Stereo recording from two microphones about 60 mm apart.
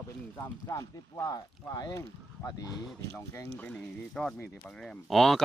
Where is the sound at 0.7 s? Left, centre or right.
Left.